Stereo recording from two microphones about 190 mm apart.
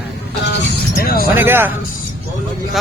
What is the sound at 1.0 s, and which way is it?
Speech, 50° left (ahead or behind).